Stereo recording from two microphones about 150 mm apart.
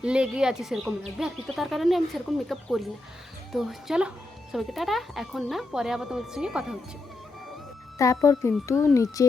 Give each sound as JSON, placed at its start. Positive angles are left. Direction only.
{"t": 0.0, "sound": "speech", "side_deg": -5}
{"t": 7.9, "sound": "speech", "side_deg": 20}